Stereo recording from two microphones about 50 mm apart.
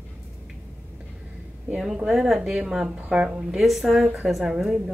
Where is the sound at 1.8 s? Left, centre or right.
Centre.